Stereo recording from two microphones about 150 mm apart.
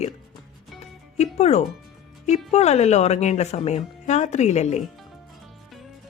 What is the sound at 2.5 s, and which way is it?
Speech, 45° left (ahead or behind).